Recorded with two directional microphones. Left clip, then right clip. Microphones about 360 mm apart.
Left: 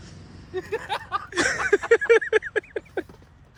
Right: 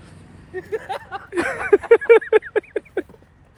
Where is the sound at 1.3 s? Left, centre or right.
Centre.